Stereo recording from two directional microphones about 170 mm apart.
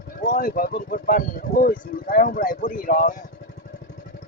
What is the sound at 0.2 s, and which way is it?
Speech, 55° left (ahead or behind).